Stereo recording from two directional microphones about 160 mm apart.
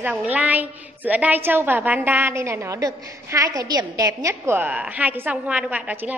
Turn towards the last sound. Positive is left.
turn(degrees=-10)  # may be behind; listen again after turning